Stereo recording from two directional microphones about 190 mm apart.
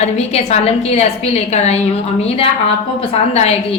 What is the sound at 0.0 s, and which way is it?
A woman's voice, 35° left (ahead or behind).